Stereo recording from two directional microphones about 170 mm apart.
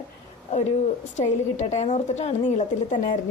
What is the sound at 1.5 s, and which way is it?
Speech, 40° left (ahead or behind).